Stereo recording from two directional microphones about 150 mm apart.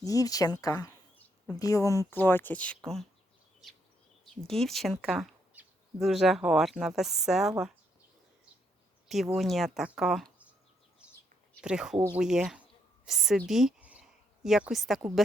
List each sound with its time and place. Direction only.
0.0 s speech: 25° left (ahead or behind); by 3.1 s 5° left (ahead or behind)
4.4 s speech: 5° left (ahead or behind)
9.0 s speech: centre (ahead or behind)
11.0 s bird: 10° right (ahead or behind)
11.6 s a woman's voice: 5° right (ahead or behind)